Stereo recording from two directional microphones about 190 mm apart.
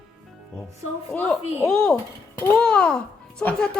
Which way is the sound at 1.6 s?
5° left (ahead or behind).